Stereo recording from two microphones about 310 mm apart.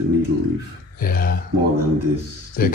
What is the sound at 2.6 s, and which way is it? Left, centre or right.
Speech, left.